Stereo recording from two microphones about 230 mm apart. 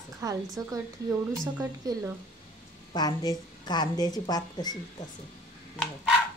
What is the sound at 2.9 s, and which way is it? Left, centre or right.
A woman's voice, centre.